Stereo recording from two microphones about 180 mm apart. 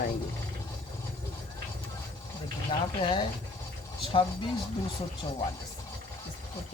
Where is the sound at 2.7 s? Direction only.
30° left (ahead or behind).